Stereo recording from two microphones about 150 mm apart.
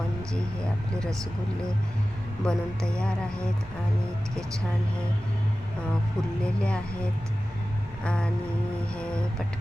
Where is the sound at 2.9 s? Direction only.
5° left (ahead or behind).